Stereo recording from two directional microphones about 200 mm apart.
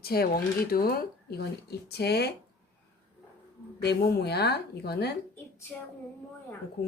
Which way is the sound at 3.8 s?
55° left (ahead or behind).